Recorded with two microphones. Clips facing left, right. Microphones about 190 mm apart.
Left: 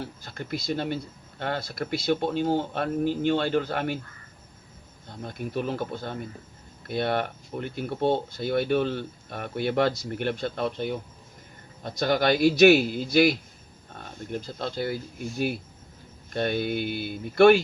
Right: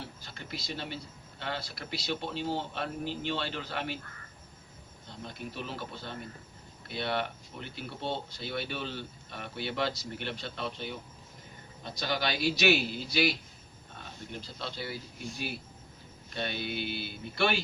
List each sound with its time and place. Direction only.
0.2 s speech: 50° left (ahead or behind)
5.0 s speech: 50° left (ahead or behind)
16.3 s speech: 50° left (ahead or behind)